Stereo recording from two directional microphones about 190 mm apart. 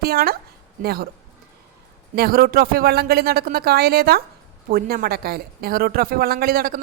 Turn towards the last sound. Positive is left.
turn(degrees=-50)  # may be behind; listen again after turning